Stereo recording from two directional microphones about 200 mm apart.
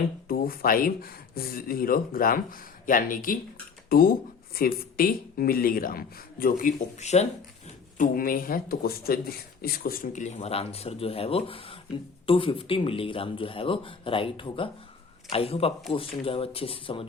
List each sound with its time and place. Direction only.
0.3 s speech: 45° left (ahead or behind); by 17.1 s 25° left (ahead or behind)